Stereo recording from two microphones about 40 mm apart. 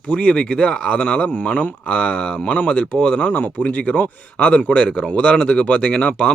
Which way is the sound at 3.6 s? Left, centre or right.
Left.